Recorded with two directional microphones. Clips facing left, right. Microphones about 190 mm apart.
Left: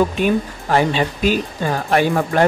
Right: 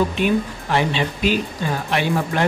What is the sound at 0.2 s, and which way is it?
Speech, 45° left (ahead or behind).